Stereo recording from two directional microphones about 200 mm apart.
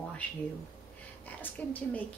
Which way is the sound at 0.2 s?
5° left (ahead or behind).